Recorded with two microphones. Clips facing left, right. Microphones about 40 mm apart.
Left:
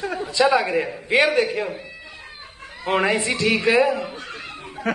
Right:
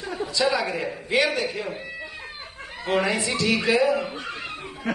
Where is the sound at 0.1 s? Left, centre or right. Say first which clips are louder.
Left 5 dB; left.